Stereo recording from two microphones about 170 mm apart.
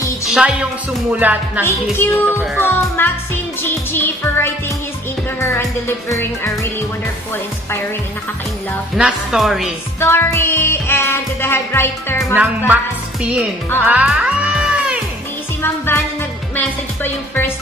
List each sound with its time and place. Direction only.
0.3 s speech: 5° right (ahead or behind)
1.1 s music: 10° right (ahead or behind)
1.6 s music: 15° left (ahead or behind)
8.9 s speech: centre (ahead or behind)
9.9 s music: 15° left (ahead or behind)
13.8 s cat: 5° right (ahead or behind)
15.6 s music: 15° left (ahead or behind)